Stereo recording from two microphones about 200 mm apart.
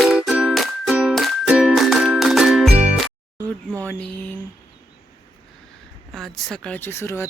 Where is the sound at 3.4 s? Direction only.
5° left (ahead or behind).